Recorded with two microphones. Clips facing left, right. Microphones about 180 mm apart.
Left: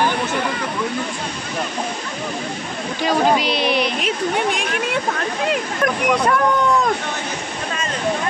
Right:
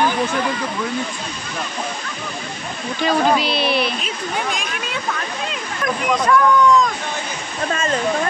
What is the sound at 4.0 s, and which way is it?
Speech, 70° left (ahead or behind).